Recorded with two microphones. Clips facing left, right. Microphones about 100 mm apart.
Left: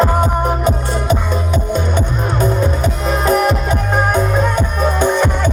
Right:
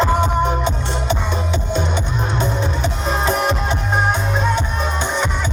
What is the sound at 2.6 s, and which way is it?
Music, 25° right (ahead or behind).